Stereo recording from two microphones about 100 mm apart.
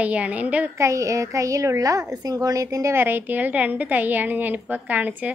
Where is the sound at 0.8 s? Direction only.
30° right (ahead or behind).